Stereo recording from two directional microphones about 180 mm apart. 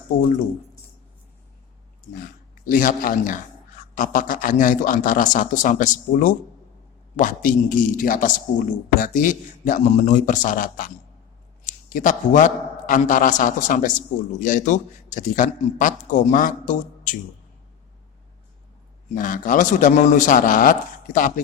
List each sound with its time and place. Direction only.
2.6 s a man's voice: 50° left (ahead or behind)
19.1 s a man's voice: 50° left (ahead or behind)